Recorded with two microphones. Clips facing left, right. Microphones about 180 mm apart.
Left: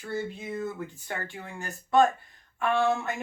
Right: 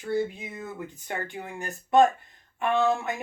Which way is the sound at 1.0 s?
15° right (ahead or behind).